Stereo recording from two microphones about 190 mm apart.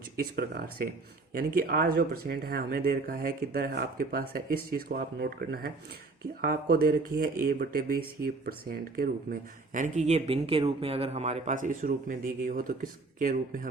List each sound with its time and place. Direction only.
0.2 s speech: 55° right (ahead or behind)